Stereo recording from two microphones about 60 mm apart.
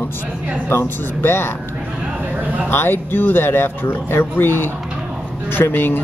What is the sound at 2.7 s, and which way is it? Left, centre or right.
Speech, left.